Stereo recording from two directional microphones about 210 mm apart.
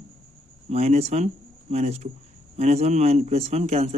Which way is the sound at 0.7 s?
30° right (ahead or behind).